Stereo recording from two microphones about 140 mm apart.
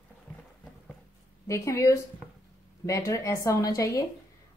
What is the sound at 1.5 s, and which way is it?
Speech, 25° left (ahead or behind).